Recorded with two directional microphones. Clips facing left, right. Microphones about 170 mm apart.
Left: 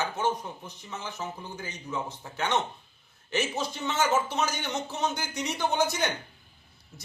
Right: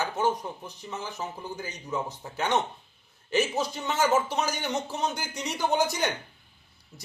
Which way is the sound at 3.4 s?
35° right (ahead or behind).